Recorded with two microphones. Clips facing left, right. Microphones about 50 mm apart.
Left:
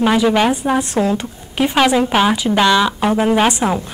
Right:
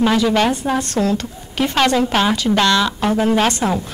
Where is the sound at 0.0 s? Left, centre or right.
Centre.